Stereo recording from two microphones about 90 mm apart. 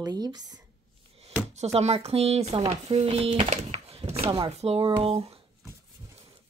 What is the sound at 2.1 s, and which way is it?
Speech, 90° right.